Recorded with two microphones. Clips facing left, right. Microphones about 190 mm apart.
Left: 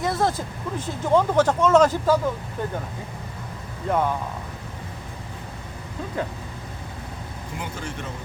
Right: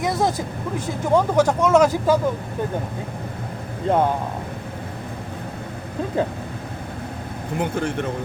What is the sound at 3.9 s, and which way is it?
Speech, 30° right (ahead or behind).